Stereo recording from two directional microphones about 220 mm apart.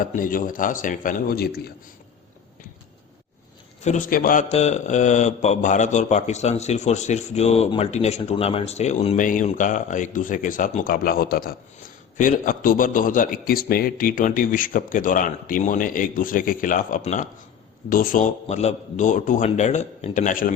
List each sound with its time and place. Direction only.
0.0 s speech: 40° left (ahead or behind)
3.8 s speech: 35° left (ahead or behind)